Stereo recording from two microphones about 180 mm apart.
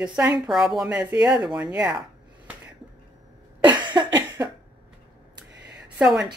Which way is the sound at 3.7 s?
25° right (ahead or behind).